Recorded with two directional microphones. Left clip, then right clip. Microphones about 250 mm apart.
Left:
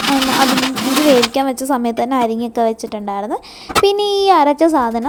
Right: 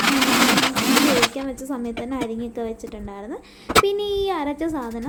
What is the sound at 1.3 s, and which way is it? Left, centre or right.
A woman's voice, left.